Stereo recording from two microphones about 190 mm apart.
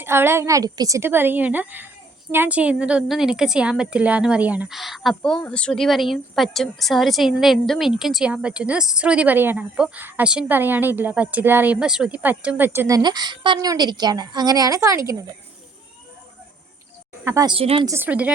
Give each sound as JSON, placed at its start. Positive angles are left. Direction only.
{"t": 0.0, "sound": "a woman's voice", "side_deg": -10}
{"t": 13.0, "sound": "a woman's voice", "side_deg": -20}
{"t": 17.2, "sound": "speech", "side_deg": -15}
{"t": 17.5, "sound": "a woman's voice", "side_deg": -30}
{"t": 17.8, "sound": "a woman's voice", "side_deg": -10}